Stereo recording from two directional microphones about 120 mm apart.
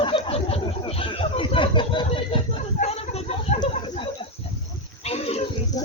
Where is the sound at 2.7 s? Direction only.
70° left (ahead or behind).